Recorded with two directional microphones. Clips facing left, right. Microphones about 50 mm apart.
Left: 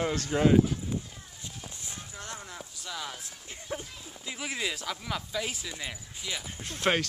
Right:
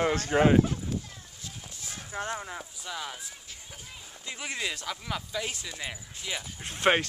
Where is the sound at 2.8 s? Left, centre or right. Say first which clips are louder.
Even; centre.